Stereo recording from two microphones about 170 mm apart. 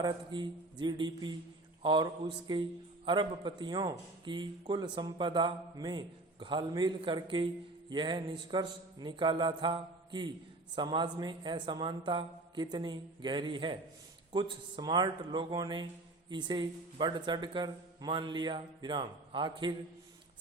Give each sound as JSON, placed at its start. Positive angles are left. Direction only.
{"t": 0.0, "sound": "a man's voice", "side_deg": -25}